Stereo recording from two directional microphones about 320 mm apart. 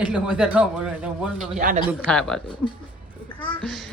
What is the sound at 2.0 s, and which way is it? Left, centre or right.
Speech, centre.